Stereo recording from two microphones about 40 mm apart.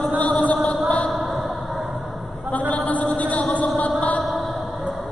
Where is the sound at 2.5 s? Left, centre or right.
Left.